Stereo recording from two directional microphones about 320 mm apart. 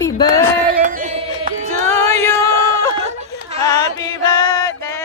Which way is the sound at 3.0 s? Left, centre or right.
Centre.